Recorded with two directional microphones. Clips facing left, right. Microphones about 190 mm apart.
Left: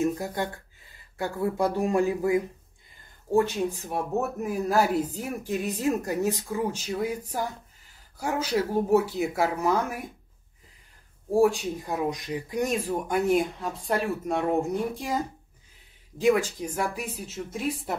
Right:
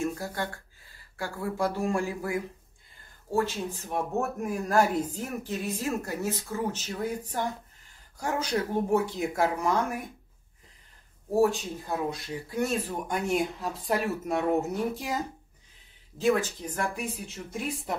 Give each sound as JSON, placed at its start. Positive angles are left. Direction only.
{"t": 0.0, "sound": "speech", "side_deg": 20}
{"t": 11.2, "sound": "speech", "side_deg": 10}
{"t": 16.2, "sound": "a woman's voice", "side_deg": 15}